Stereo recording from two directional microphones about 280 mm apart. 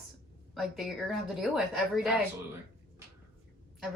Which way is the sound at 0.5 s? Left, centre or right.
Centre.